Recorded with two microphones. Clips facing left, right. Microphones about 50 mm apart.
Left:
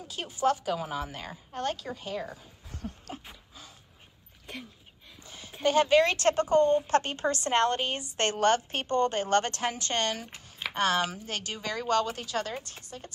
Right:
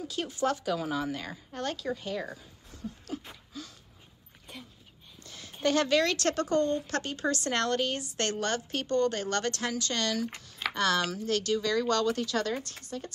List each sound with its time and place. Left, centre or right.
0.1 s speech: centre
2.7 s a sound: left
3.3 s a sound: centre
5.2 s a woman's voice: centre
7.0 s a woman's voice: left
10.7 s speech: left